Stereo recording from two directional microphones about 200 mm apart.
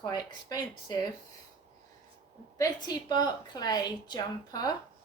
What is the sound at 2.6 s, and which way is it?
A woman's voice, 20° left (ahead or behind).